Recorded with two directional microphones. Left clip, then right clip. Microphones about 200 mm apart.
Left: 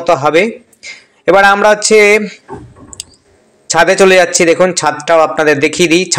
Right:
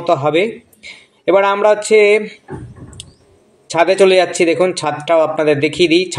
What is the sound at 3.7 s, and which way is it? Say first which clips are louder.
A man's voice: left 4 dB; 15° left (ahead or behind).